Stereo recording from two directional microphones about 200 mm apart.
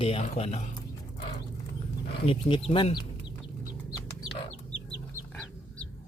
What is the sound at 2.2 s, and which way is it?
Speech, 30° left (ahead or behind).